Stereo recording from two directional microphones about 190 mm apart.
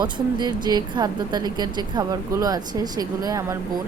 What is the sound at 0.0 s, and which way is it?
Speech, 20° right (ahead or behind).